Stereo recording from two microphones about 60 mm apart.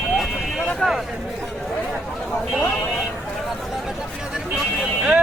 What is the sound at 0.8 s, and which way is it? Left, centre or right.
Speech, centre.